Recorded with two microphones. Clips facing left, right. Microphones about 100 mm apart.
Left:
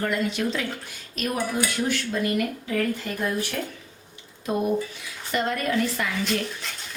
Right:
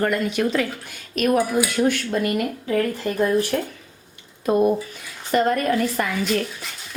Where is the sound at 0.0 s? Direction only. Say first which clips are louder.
Right 4 dB; 55° right (ahead or behind).